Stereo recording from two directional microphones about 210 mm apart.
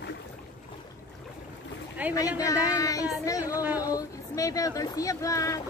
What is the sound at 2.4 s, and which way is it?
Speech, 15° left (ahead or behind).